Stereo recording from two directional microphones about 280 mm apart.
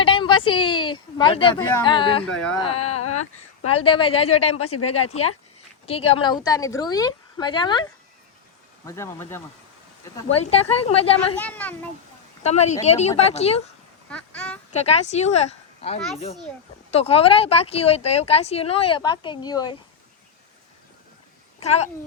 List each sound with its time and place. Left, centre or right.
0.0 s a woman's voice: centre
3.0 s speech: left
3.7 s speech: centre
4.6 s speech: left
5.8 s a woman's voice: left
8.9 s a woman's voice: centre
10.2 s speech: left
11.3 s a child's voice: centre
12.4 s speech: left
14.1 s speech: centre
14.7 s speech: left